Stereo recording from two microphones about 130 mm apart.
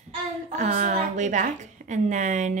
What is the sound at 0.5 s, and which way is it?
A woman's voice, 70° right (ahead or behind).